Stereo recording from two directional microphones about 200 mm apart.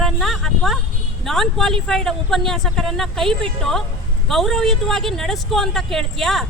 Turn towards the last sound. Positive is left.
turn(degrees=0)  # may be behind; listen again after turning